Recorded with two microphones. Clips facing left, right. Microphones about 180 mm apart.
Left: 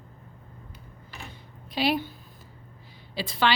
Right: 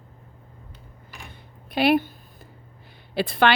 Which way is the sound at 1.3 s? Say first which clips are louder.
Even; 55° right (ahead or behind).